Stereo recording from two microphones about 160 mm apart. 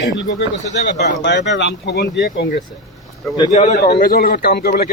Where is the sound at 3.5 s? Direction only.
50° left (ahead or behind).